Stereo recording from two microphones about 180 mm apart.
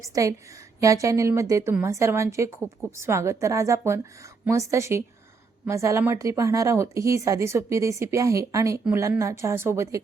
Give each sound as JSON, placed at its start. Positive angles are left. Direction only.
{"t": 0.0, "sound": "a woman's voice", "side_deg": -20}